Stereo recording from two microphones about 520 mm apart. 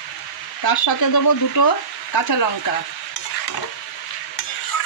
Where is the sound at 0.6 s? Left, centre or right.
Left.